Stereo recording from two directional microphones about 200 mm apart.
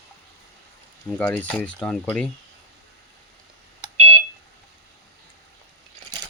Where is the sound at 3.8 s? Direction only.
30° right (ahead or behind).